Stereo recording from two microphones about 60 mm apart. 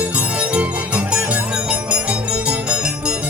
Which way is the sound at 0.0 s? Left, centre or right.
Right.